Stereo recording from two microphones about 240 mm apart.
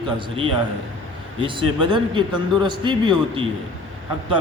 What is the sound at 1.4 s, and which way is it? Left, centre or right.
Speech, right.